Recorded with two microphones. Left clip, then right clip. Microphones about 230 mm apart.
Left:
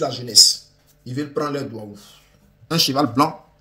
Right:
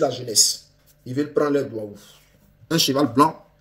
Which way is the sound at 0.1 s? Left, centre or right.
Centre.